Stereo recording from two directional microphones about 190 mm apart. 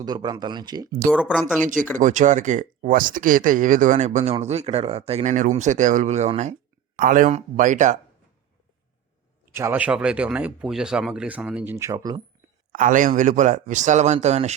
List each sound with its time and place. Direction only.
0.0 s speech: 20° right (ahead or behind)
1.1 s speech: centre (ahead or behind)
2.0 s speech: 40° right (ahead or behind)
9.6 s speech: 10° right (ahead or behind)
12.7 s speech: 45° right (ahead or behind)